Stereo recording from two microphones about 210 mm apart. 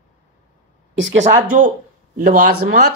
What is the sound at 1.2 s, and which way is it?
Speech, 40° right (ahead or behind).